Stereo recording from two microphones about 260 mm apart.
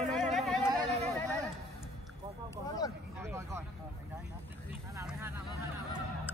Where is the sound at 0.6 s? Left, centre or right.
Centre.